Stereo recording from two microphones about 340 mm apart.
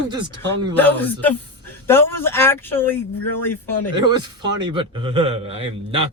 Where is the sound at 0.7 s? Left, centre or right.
Centre.